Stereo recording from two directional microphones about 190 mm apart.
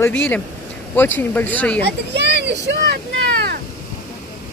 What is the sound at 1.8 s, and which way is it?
Speech, 65° right (ahead or behind).